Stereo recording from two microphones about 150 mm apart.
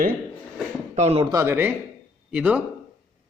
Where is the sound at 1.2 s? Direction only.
15° right (ahead or behind).